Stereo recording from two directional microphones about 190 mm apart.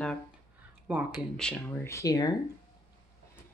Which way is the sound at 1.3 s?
5° left (ahead or behind).